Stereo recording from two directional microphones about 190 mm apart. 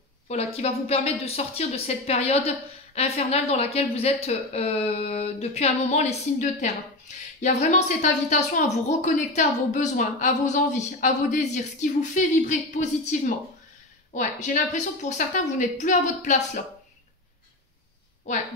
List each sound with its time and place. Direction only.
0.3 s a woman's voice: 35° left (ahead or behind)